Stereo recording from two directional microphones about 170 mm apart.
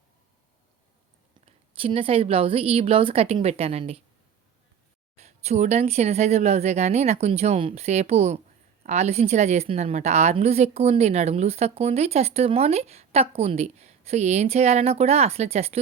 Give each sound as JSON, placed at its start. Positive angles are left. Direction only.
{"t": 1.5, "sound": "a woman's voice", "side_deg": -35}
{"t": 5.1, "sound": "a woman's voice", "side_deg": -40}